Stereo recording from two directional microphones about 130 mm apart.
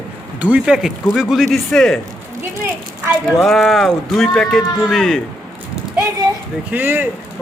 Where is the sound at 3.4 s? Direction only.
Centre (ahead or behind).